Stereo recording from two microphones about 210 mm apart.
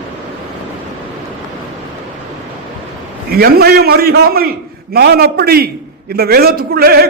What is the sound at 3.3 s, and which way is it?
A man's voice, 50° right (ahead or behind).